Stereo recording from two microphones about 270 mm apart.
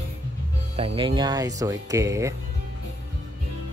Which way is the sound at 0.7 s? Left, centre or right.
Centre.